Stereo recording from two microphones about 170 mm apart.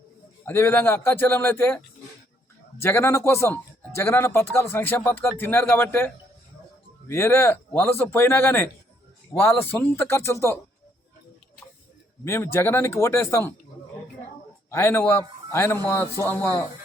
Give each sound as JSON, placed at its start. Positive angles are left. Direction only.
{"t": 0.4, "sound": "speech", "side_deg": 15}
{"t": 7.1, "sound": "speech", "side_deg": 15}
{"t": 12.2, "sound": "speech", "side_deg": 15}
{"t": 14.7, "sound": "speech", "side_deg": 15}